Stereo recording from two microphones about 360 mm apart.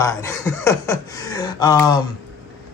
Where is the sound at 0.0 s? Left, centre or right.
Centre.